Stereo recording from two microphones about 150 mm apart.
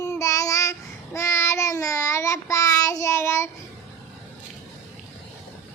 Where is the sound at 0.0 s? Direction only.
20° left (ahead or behind).